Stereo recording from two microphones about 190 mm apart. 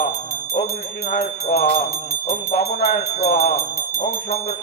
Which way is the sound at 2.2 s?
40° left (ahead or behind).